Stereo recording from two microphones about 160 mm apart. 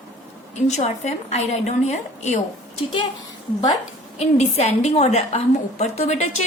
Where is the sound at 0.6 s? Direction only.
45° left (ahead or behind).